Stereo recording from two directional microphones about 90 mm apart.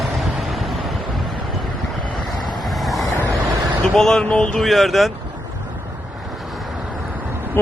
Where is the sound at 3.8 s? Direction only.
5° left (ahead or behind).